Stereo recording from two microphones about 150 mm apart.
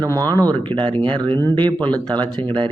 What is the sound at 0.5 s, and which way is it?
Speech, 35° right (ahead or behind).